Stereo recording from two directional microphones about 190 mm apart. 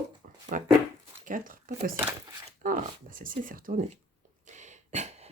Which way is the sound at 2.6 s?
45° right (ahead or behind).